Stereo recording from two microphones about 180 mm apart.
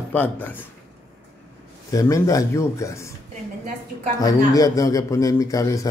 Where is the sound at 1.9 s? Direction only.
20° left (ahead or behind).